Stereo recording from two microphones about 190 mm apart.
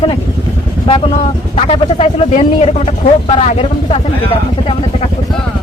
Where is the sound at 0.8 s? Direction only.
30° left (ahead or behind).